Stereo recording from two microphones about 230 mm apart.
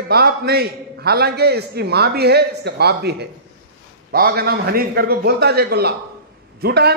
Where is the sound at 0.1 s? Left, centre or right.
Right.